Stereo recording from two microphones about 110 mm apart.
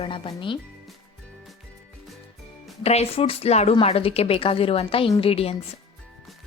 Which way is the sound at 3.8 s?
65° left (ahead or behind).